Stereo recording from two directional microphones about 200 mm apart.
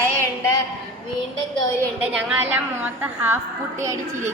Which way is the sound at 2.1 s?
5° right (ahead or behind).